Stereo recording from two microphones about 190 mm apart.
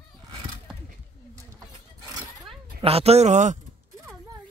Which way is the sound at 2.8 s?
30° right (ahead or behind).